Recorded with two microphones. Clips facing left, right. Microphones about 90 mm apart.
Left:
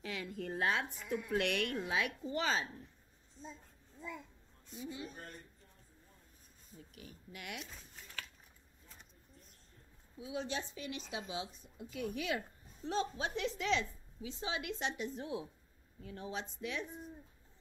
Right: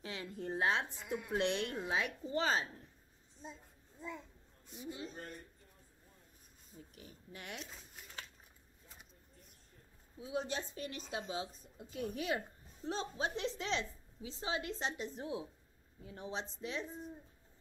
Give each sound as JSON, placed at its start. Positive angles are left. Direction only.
{"t": 0.0, "sound": "a woman's voice", "side_deg": -30}
{"t": 4.7, "sound": "speech", "side_deg": -25}
{"t": 6.8, "sound": "a woman's voice", "side_deg": -30}
{"t": 7.6, "sound": "a sound", "side_deg": -5}
{"t": 10.2, "sound": "a woman's voice", "side_deg": -35}